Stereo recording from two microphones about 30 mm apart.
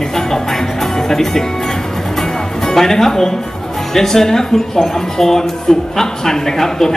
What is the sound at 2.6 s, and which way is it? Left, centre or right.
Speech, centre.